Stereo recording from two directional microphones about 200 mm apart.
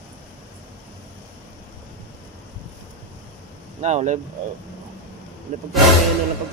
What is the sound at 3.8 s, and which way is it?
Speech, 35° right (ahead or behind).